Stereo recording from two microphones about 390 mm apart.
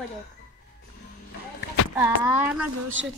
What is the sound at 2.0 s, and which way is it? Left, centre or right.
Speech, centre.